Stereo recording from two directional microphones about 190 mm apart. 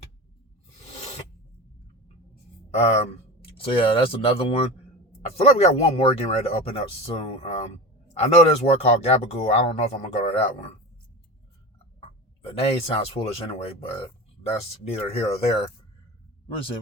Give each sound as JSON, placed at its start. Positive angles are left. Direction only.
{"t": 2.7, "sound": "speech", "side_deg": 35}
{"t": 11.9, "sound": "speech", "side_deg": 30}